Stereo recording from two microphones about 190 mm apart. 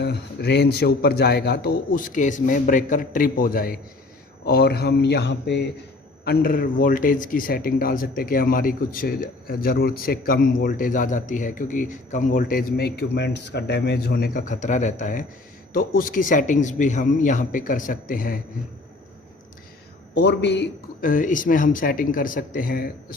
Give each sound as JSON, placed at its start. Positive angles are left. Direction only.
{"t": 0.0, "sound": "a man's voice", "side_deg": 60}
{"t": 6.2, "sound": "speech", "side_deg": 45}
{"t": 20.1, "sound": "a man's voice", "side_deg": 65}
{"t": 21.0, "sound": "speech", "side_deg": 45}